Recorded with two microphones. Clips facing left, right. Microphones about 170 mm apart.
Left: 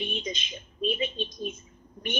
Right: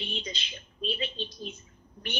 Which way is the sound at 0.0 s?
20° left (ahead or behind).